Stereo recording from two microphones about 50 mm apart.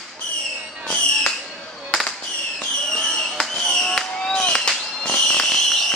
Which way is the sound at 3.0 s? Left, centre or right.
Centre.